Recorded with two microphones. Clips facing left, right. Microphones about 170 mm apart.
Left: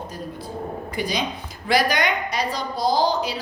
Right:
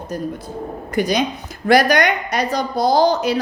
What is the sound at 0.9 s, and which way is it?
Speech, 45° right (ahead or behind).